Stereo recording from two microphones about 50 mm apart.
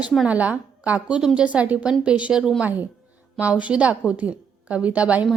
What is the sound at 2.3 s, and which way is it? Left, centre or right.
Speech, centre.